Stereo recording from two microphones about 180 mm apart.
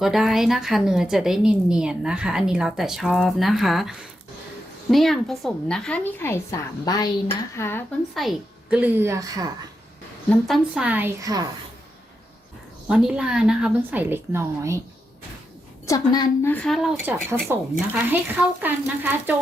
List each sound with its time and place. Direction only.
0.0 s a woman's voice: centre (ahead or behind)
8.1 s a woman's voice: centre (ahead or behind); by 9.5 s 20° right (ahead or behind)
10.2 s a woman's voice: centre (ahead or behind); by 11.4 s 20° right (ahead or behind)
12.9 s a woman's voice: 5° right (ahead or behind)
15.9 s a woman's voice: 20° left (ahead or behind)
16.5 s a woman's voice: 5° left (ahead or behind)
17.0 s a woman's voice: 10° right (ahead or behind)